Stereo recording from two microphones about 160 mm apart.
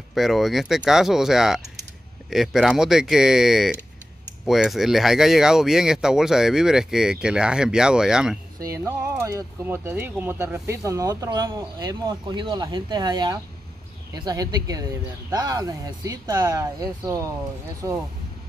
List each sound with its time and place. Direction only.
0.1 s speech: centre (ahead or behind)
8.5 s speech: 20° right (ahead or behind)